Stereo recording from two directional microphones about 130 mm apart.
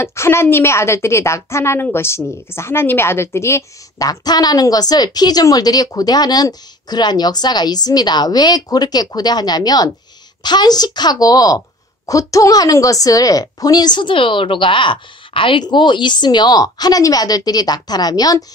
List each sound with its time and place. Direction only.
0.0 s a woman's voice: 20° left (ahead or behind)